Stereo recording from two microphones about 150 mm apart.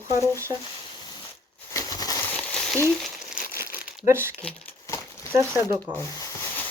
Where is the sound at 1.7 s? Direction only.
25° left (ahead or behind).